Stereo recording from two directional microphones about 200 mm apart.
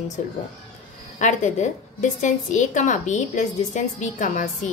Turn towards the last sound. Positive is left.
turn(degrees=40)  # may be behind; listen again after turning